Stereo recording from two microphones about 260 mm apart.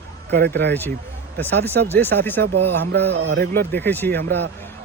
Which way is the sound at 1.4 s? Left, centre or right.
Centre.